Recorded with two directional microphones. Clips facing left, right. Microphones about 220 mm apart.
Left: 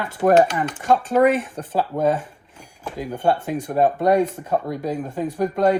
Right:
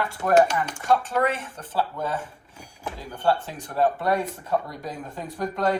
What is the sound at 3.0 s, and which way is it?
Speech, 15° left (ahead or behind).